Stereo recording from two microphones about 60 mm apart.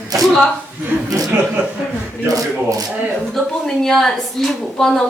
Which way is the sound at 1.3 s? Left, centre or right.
Right.